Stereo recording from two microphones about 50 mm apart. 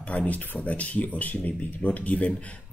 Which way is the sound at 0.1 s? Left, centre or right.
Left.